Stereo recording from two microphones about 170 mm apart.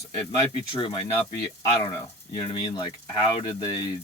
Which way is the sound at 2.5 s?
25° left (ahead or behind).